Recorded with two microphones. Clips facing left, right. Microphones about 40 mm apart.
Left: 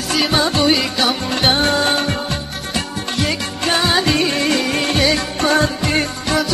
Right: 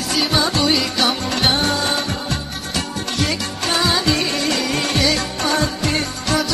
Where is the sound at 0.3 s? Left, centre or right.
Left.